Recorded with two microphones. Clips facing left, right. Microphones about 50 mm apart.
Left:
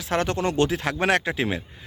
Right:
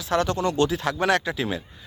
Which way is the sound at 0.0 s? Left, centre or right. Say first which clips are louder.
Right 1 dB; left.